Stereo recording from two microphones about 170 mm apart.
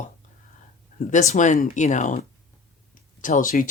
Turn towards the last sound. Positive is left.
turn(degrees=50)  # may be behind; listen again after turning